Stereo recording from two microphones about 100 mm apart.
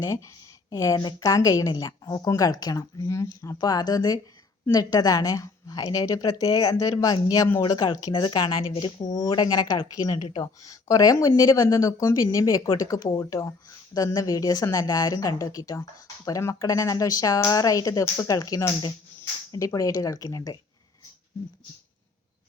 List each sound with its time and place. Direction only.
0.0 s speech: 30° left (ahead or behind)
7.6 s a woman's voice: 50° left (ahead or behind); by 9.0 s 65° left (ahead or behind)
9.1 s speech: 40° left (ahead or behind)